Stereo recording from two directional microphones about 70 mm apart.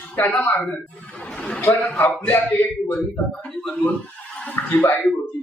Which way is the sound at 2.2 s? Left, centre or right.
Left.